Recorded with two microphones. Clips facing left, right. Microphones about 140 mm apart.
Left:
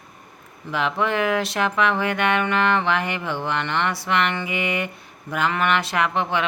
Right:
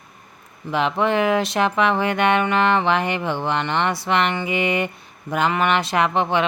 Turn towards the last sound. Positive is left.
turn(degrees=-25)  # may be behind; listen again after turning